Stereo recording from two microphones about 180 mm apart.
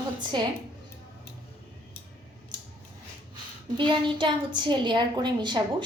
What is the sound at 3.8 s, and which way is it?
A woman's voice, 25° right (ahead or behind).